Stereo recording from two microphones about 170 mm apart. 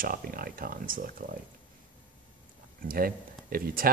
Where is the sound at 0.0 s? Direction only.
55° right (ahead or behind).